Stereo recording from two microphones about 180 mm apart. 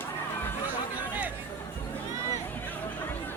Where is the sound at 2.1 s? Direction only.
15° left (ahead or behind).